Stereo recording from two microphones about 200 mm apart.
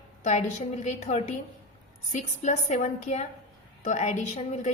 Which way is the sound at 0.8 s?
35° left (ahead or behind).